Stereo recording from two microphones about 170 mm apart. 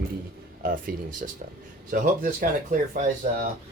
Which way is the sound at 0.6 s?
55° right (ahead or behind).